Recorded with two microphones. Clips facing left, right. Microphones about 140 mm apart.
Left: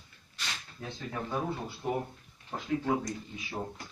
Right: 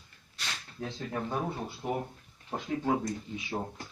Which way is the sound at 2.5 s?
25° right (ahead or behind).